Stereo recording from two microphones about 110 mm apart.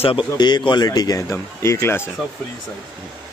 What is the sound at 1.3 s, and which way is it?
Speech, 25° left (ahead or behind).